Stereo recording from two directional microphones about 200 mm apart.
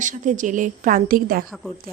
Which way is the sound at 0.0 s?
40° right (ahead or behind).